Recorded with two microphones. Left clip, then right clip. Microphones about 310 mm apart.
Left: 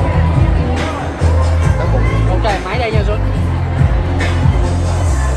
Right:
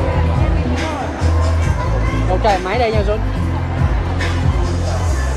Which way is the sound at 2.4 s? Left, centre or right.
Right.